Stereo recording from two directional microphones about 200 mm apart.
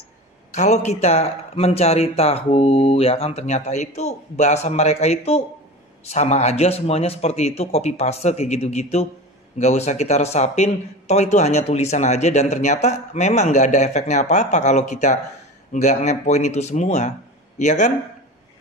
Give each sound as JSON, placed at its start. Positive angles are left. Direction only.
{"t": 0.6, "sound": "speech", "side_deg": 35}